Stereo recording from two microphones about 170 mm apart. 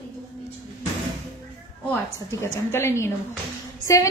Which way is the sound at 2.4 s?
15° left (ahead or behind).